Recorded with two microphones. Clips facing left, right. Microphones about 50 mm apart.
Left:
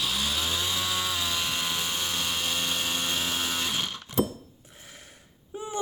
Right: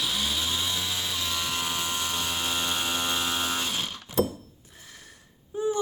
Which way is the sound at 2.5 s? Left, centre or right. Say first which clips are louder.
Right 1 dB; centre.